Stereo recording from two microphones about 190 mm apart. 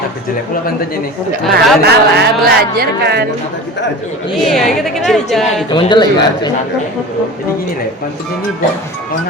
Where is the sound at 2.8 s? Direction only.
55° right (ahead or behind).